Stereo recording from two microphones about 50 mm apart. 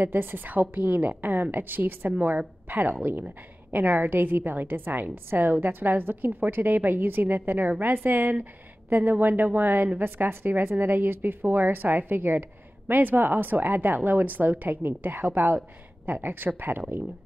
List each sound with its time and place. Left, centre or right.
0.0 s a woman's voice: right